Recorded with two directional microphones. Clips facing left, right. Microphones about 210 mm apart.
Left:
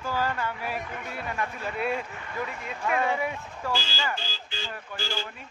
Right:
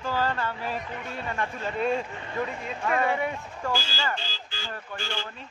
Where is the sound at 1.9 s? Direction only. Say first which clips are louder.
Right 3 dB; 30° right (ahead or behind).